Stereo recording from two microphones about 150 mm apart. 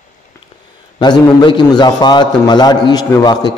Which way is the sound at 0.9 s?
30° left (ahead or behind).